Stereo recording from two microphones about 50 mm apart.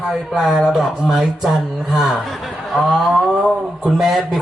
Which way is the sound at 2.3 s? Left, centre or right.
Centre.